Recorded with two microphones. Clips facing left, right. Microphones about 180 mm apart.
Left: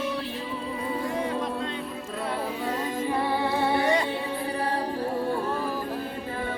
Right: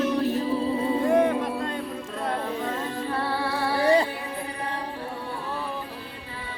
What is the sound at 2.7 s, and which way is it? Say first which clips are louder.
Music: left 2 dB; 15° left (ahead or behind).